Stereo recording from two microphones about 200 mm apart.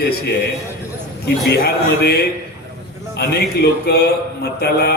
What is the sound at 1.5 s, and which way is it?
Speech, 55° left (ahead or behind).